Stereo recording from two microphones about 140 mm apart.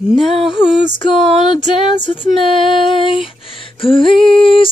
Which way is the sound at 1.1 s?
35° left (ahead or behind).